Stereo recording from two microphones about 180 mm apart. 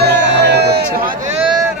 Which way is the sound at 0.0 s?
70° right (ahead or behind).